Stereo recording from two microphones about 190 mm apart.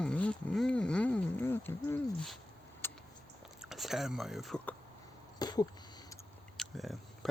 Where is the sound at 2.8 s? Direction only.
10° left (ahead or behind).